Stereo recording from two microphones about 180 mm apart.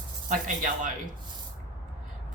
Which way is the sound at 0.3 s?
45° right (ahead or behind).